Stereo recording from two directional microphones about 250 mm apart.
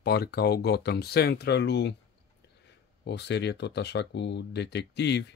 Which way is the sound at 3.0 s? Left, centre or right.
Left.